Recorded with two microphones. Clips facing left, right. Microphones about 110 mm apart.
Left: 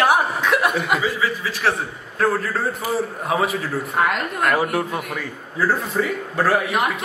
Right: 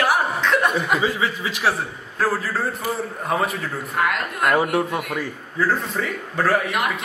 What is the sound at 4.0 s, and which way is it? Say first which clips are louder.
Speech: left 2 dB; 25° left (ahead or behind).